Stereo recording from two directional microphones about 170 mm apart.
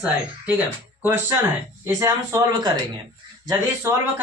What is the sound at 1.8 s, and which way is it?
Speech, 15° right (ahead or behind).